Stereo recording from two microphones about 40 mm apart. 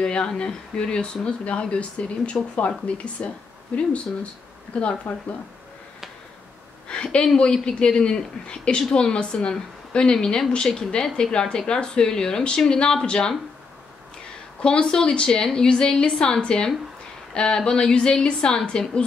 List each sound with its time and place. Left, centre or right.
0.0 s speech: left
6.9 s speech: left
14.6 s speech: left